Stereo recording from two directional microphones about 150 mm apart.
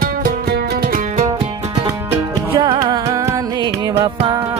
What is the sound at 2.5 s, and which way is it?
Music, 25° right (ahead or behind).